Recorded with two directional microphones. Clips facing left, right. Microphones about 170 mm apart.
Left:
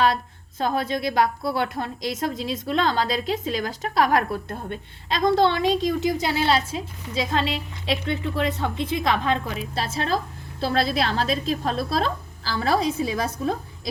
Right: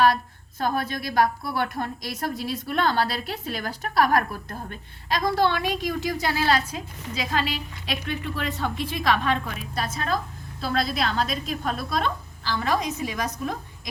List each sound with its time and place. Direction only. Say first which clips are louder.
0.6 s a woman's voice: left 3 dB; 25° left (ahead or behind)